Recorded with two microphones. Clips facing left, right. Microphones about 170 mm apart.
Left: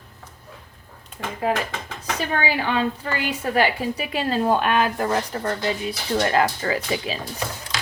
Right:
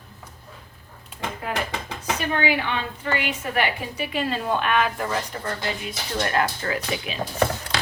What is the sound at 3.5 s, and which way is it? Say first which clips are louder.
A woman's voice: left 6 dB; 35° left (ahead or behind).